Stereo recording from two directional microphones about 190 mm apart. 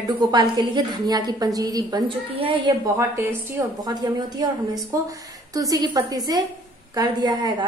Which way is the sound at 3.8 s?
20° right (ahead or behind).